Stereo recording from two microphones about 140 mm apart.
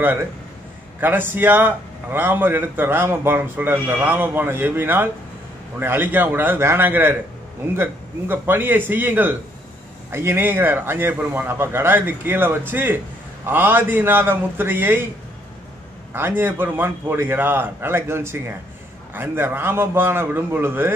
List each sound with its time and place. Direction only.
0.0 s a man's voice: 15° right (ahead or behind)
16.1 s a man's voice: 15° right (ahead or behind)